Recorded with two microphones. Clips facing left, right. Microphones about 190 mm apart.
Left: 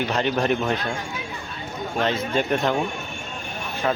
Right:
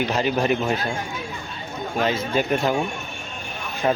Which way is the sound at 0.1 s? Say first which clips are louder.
Right 1 dB; 5° right (ahead or behind).